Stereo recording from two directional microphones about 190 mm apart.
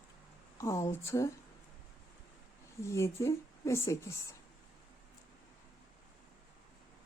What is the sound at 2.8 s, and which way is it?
Speech, 15° left (ahead or behind).